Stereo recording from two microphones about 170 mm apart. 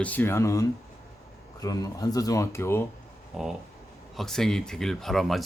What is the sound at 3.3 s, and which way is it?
Speech, centre (ahead or behind).